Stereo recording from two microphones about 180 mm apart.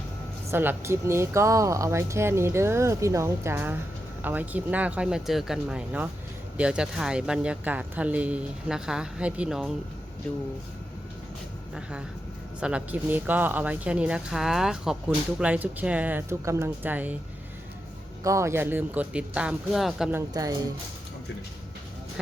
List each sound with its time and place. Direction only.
0.5 s speech: 10° right (ahead or behind); by 10.4 s 5° left (ahead or behind)
11.7 s speech: 5° right (ahead or behind)
18.2 s speech: 15° right (ahead or behind); by 20.1 s centre (ahead or behind)
20.1 s a woman's voice: 20° right (ahead or behind)